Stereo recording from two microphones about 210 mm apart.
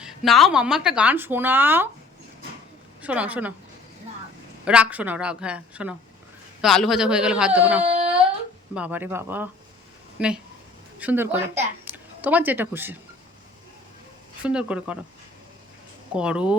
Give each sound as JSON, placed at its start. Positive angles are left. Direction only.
{"t": 0.0, "sound": "speech", "side_deg": 0}
{"t": 3.0, "sound": "a woman's voice", "side_deg": -5}
{"t": 4.6, "sound": "a woman's voice", "side_deg": -5}
{"t": 7.9, "sound": "a sound", "side_deg": -30}
{"t": 8.7, "sound": "a woman's voice", "side_deg": -5}
{"t": 14.4, "sound": "speech", "side_deg": -5}
{"t": 16.1, "sound": "speech", "side_deg": -5}